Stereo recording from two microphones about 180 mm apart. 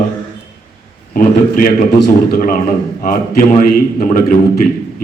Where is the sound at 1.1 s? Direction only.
55° left (ahead or behind).